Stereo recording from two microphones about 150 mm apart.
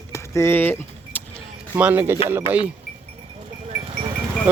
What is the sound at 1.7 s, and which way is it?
Speech, 10° right (ahead or behind).